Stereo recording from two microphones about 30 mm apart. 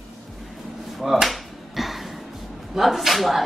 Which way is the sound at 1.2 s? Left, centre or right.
Centre.